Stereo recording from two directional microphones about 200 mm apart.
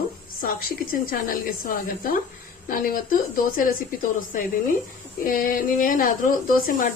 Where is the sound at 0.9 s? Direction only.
45° left (ahead or behind).